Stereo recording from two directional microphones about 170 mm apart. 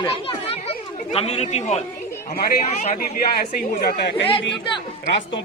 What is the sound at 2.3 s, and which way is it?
Speech, 65° left (ahead or behind).